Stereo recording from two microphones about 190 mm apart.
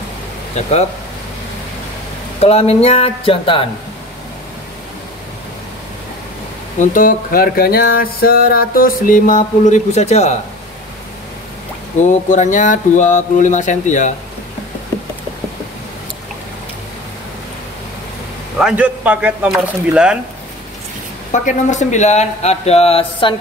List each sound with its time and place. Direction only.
2.4 s speech: 35° left (ahead or behind)
6.8 s a sound: 45° left (ahead or behind)
12.0 s speech: 40° left (ahead or behind)
18.6 s speech: 5° right (ahead or behind)
21.3 s speech: 40° left (ahead or behind)